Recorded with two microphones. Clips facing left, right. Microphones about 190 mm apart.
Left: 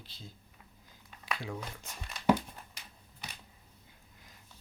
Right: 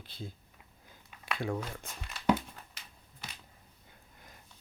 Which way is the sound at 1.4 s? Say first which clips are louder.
Right 6 dB; 55° right (ahead or behind).